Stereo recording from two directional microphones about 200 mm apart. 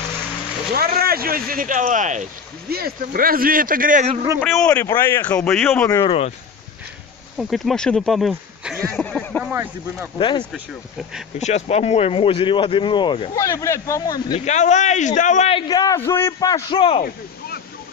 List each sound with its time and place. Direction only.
0.7 s speech: 50° right (ahead or behind)
4.4 s speech: 5° left (ahead or behind)
7.3 s speech: centre (ahead or behind)
9.4 s speech: 10° right (ahead or behind)
10.1 s speech: 25° left (ahead or behind)
10.5 s speech: centre (ahead or behind)
11.3 s speech: 35° left (ahead or behind); by 14.4 s 20° left (ahead or behind)
14.4 s a man's voice: 35° left (ahead or behind)
15.7 s speech: 20° left (ahead or behind)